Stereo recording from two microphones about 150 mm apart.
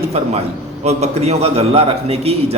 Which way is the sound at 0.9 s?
45° right (ahead or behind).